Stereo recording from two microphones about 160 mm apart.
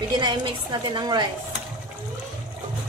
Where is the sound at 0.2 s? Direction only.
30° right (ahead or behind).